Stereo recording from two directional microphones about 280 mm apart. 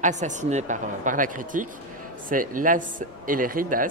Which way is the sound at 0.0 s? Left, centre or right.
Right.